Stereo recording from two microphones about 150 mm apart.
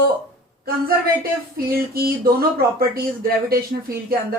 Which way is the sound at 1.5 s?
85° right.